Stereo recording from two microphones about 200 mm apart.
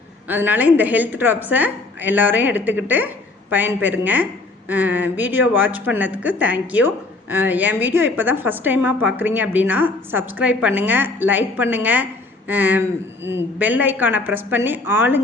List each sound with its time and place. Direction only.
0.3 s a woman's voice: 10° right (ahead or behind)